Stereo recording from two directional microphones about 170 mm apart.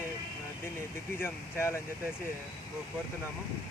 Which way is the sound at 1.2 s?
15° left (ahead or behind).